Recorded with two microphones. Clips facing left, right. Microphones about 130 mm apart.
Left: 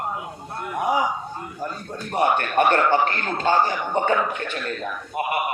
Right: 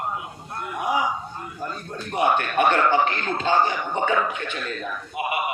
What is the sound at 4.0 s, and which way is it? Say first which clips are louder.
Speech: left 2 dB; 45° left (ahead or behind).